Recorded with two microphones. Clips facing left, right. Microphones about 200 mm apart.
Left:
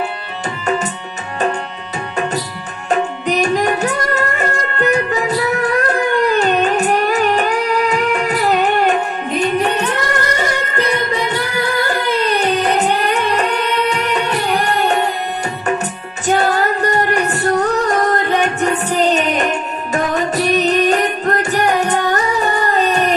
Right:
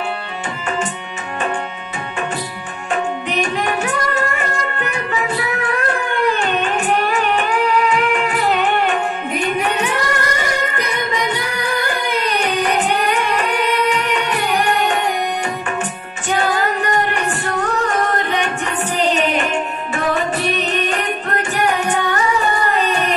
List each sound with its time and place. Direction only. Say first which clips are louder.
2.9 s music: left 4 dB; 40° left (ahead or behind)
12.6 s music: left 2 dB; 40° left (ahead or behind)